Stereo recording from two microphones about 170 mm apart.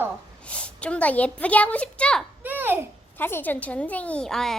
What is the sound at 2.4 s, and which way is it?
Babbling, 10° right (ahead or behind).